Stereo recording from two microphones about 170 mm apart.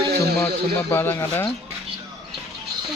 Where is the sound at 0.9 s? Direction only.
15° left (ahead or behind).